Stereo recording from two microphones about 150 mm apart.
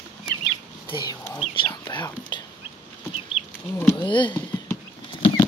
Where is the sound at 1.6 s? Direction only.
30° left (ahead or behind).